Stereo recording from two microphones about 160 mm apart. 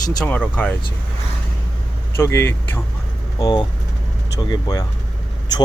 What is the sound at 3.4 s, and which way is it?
Speech, 25° left (ahead or behind).